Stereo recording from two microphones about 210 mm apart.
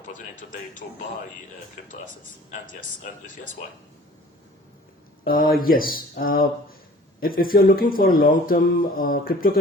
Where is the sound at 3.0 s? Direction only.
40° left (ahead or behind).